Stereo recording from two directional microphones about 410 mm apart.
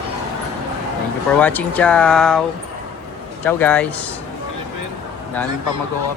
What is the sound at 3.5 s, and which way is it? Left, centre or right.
Speech, centre.